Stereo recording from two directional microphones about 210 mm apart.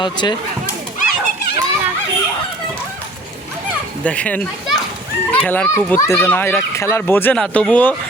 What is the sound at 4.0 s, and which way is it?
Speech, 5° left (ahead or behind).